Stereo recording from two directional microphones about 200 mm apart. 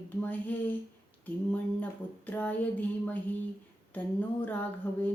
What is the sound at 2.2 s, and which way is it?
Speech, 10° left (ahead or behind).